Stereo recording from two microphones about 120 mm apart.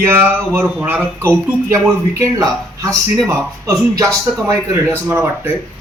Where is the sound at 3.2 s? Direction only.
25° right (ahead or behind).